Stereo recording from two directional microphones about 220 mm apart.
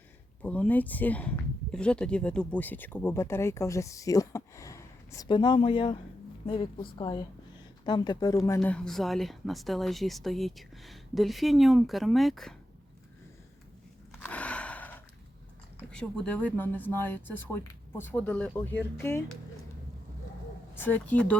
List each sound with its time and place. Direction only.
0.4 s a woman's voice: 5° left (ahead or behind)
14.1 s a sound: 5° left (ahead or behind)
15.9 s speech: 5° left (ahead or behind)
20.7 s speech: 10° left (ahead or behind)